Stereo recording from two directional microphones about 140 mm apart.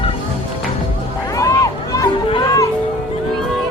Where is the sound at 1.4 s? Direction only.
25° left (ahead or behind).